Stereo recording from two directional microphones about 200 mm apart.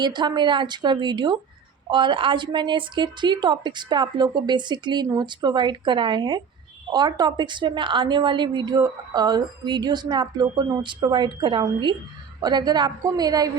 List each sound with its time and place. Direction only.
0.0 s a woman's voice: 20° right (ahead or behind)